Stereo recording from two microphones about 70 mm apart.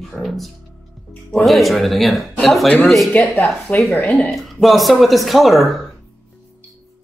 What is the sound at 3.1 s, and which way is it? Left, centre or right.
Speech, left.